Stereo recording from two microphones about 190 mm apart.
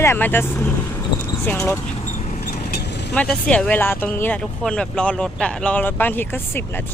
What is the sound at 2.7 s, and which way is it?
Vehicle, 60° left (ahead or behind).